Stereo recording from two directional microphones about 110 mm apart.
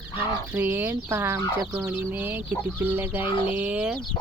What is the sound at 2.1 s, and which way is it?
Speech, 15° right (ahead or behind).